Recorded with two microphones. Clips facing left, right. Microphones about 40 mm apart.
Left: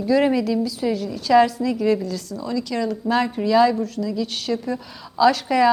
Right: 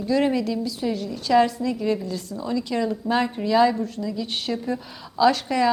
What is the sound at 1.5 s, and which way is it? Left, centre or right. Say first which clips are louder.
Speech: left 4 dB; centre.